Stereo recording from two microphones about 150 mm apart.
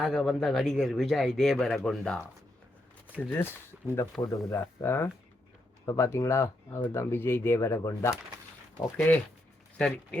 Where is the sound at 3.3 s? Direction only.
15° left (ahead or behind).